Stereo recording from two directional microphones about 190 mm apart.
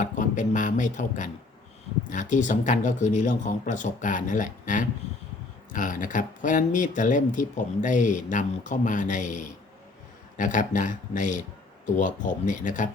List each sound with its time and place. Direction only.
0.0 s speech: 40° left (ahead or behind)